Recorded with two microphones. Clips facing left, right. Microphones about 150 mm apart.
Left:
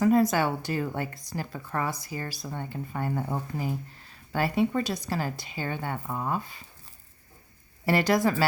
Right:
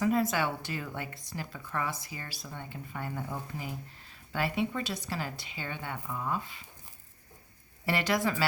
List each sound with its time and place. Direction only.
0.0 s a woman's voice: 40° left (ahead or behind)
7.9 s a woman's voice: 40° left (ahead or behind)